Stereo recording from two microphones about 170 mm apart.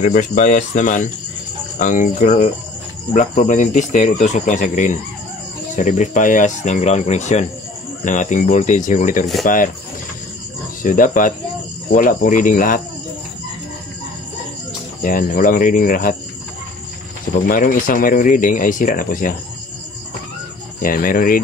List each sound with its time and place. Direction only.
0.0 s speech: 50° left (ahead or behind)
10.8 s speech: 50° left (ahead or behind)
15.0 s speech: 55° left (ahead or behind)
17.5 s speech: 55° left (ahead or behind)
20.8 s speech: 55° left (ahead or behind)